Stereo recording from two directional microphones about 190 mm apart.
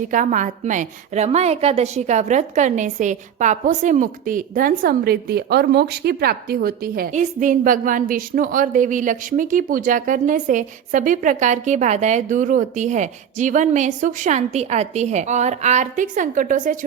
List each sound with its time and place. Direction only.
0.1 s a woman's voice: 40° right (ahead or behind)